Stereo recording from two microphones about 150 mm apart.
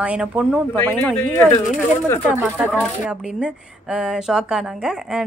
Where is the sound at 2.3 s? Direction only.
10° right (ahead or behind).